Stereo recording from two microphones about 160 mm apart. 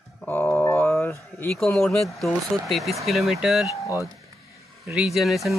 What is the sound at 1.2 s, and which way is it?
Speech, 10° left (ahead or behind).